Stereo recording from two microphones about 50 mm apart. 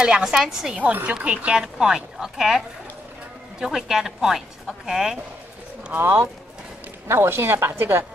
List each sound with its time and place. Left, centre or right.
0.0 s speech: centre
1.1 s speech: right
5.9 s a woman's voice: right